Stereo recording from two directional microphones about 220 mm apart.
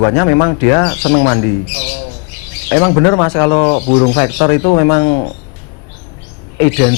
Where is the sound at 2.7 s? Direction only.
15° left (ahead or behind).